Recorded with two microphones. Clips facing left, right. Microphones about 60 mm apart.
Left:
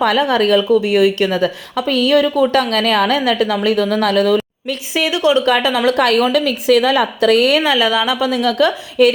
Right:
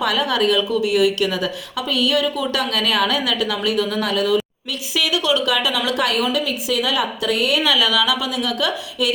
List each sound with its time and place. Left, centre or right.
0.0 s a woman's voice: left
4.7 s a woman's voice: left
5.5 s a woman's voice: left
7.6 s a woman's voice: left